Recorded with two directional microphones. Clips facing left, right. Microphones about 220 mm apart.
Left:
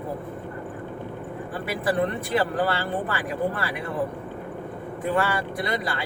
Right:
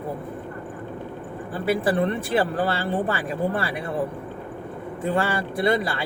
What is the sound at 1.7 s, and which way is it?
Speech, 30° right (ahead or behind).